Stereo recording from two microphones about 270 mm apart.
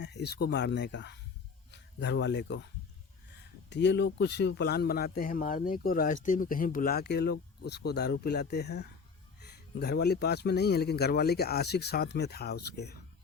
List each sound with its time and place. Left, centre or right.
0.0 s speech: left
3.7 s speech: left